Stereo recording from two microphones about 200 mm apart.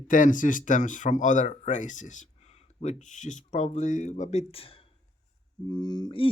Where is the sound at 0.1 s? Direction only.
40° left (ahead or behind).